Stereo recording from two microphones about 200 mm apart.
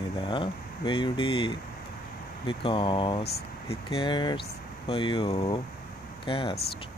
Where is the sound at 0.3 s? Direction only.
25° left (ahead or behind).